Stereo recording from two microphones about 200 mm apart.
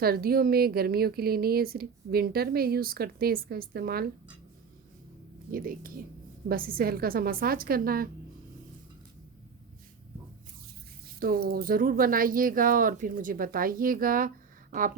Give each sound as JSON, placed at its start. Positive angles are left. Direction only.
{"t": 0.0, "sound": "a woman's voice", "side_deg": -50}
{"t": 5.5, "sound": "a woman's voice", "side_deg": -45}
{"t": 11.2, "sound": "a woman's voice", "side_deg": -45}